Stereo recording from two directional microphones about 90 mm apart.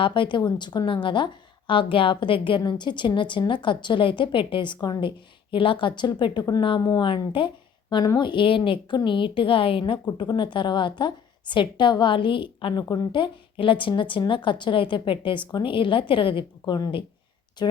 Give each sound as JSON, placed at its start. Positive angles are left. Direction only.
{"t": 0.0, "sound": "a woman's voice", "side_deg": 65}
{"t": 1.0, "sound": "a woman's voice", "side_deg": 65}
{"t": 2.6, "sound": "a woman's voice", "side_deg": 55}
{"t": 6.0, "sound": "a woman's voice", "side_deg": 60}
{"t": 10.2, "sound": "a woman's voice", "side_deg": 60}